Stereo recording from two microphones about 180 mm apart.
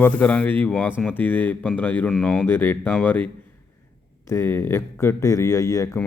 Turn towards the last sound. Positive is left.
turn(degrees=20)  # may be behind; listen again after turning